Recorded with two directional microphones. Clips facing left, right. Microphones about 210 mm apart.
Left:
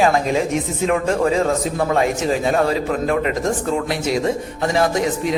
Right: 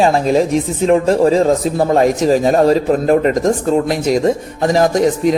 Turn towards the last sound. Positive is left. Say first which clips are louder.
# right 6 dB
turn(degrees=-40)  # may be behind; listen again after turning